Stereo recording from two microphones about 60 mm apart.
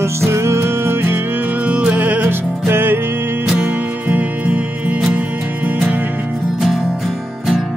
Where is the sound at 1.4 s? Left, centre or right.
Right.